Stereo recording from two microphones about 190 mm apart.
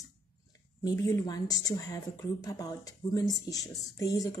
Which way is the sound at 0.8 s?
20° left (ahead or behind).